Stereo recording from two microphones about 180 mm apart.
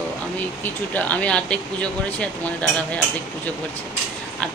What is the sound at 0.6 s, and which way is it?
Speech, 10° left (ahead or behind).